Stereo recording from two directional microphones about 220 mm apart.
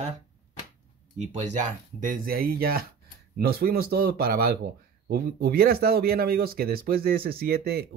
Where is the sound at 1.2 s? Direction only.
35° right (ahead or behind).